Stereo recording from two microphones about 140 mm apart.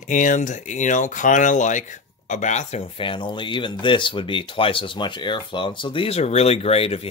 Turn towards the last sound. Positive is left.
turn(degrees=45)  # may be behind; listen again after turning